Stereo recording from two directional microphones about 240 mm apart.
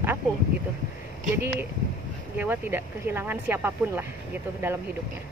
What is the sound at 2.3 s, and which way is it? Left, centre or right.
Speech, centre.